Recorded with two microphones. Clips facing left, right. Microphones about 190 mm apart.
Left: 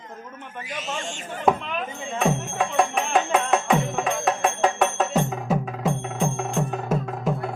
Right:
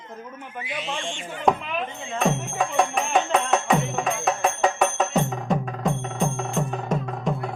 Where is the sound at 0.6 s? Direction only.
40° left (ahead or behind).